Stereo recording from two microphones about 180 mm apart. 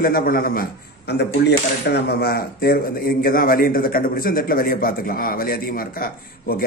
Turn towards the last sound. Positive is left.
turn(degrees=55)  # may be behind; listen again after turning